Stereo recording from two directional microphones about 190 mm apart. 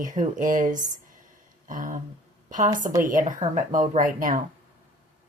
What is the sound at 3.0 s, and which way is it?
Speech, 45° right (ahead or behind).